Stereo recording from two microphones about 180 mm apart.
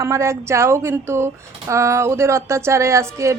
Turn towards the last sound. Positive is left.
turn(degrees=-15)  # may be behind; listen again after turning